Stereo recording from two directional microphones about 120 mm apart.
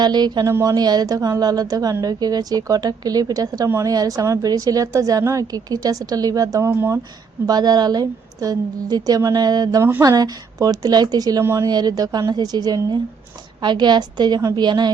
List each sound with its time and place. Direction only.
0.0 s a woman's voice: 35° right (ahead or behind); by 7.0 s 20° right (ahead or behind)
7.4 s speech: 35° right (ahead or behind)